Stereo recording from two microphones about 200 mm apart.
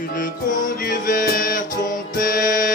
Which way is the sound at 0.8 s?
45° left (ahead or behind).